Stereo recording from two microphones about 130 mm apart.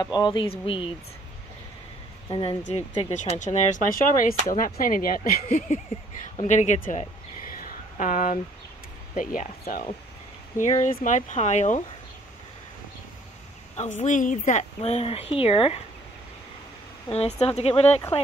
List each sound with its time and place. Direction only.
0.0 s speech: 35° left (ahead or behind)
2.2 s speech: 35° left (ahead or behind)
2.7 s speech: 60° left (ahead or behind); by 5.8 s 80° left
6.4 s speech: 65° left (ahead or behind)
7.5 s a sound: 90° left
9.1 s speech: 85° left
10.6 s speech: 65° left (ahead or behind)
13.7 s speech: 70° left (ahead or behind); by 15.8 s 45° left (ahead or behind)
17.4 s speech: 50° left (ahead or behind)